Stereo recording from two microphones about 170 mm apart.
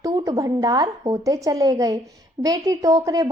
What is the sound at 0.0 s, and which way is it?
A woman's voice, 20° right (ahead or behind).